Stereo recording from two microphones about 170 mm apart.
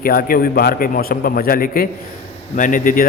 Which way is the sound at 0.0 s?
60° left (ahead or behind).